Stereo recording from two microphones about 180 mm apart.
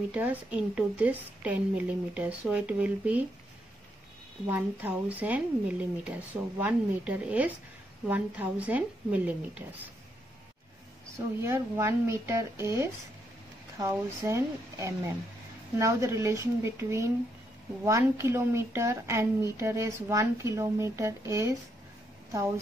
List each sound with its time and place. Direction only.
0.1 s a woman's voice: 10° right (ahead or behind)
4.5 s a woman's voice: 10° right (ahead or behind)
11.1 s a woman's voice: 15° right (ahead or behind)